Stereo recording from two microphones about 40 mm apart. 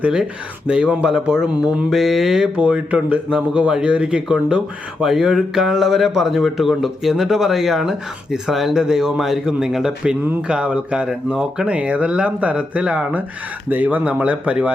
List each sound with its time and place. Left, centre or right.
0.7 s speech: right
1.9 s mantra: centre
2.6 s speech: right
5.0 s speech: centre
10.5 s speech: right
11.6 s speech: right
13.7 s speech: right